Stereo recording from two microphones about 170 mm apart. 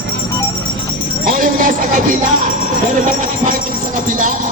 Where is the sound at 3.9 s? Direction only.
50° right (ahead or behind).